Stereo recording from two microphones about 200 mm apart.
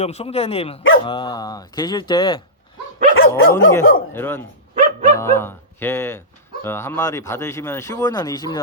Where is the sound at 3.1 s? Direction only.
90° left.